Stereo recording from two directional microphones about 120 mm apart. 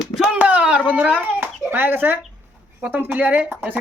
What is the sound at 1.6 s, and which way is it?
Speech, 15° right (ahead or behind).